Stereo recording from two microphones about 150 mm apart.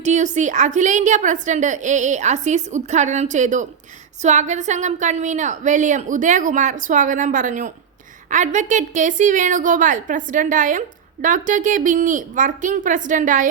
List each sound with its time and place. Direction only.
0.0 s a woman's voice: 55° right (ahead or behind)